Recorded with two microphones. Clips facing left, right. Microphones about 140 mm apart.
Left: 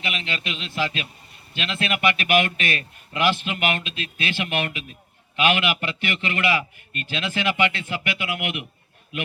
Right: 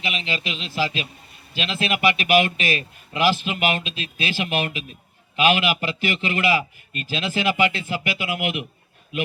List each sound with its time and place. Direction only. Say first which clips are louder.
0.0 s a man's voice: right 2 dB; 30° right (ahead or behind)